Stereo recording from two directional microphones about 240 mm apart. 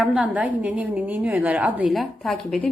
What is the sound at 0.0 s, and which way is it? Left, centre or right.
A woman's voice, centre.